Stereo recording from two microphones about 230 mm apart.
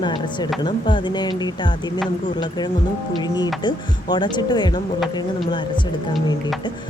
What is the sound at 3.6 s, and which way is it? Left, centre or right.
Speech, centre.